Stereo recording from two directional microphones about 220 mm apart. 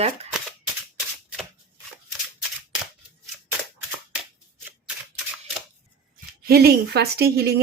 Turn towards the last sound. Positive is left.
turn(degrees=-45)  # may be behind; listen again after turning